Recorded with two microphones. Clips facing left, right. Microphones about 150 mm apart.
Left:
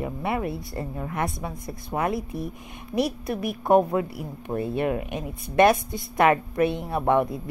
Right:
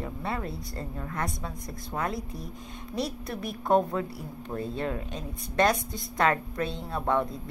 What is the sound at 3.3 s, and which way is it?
Speech, 60° left (ahead or behind).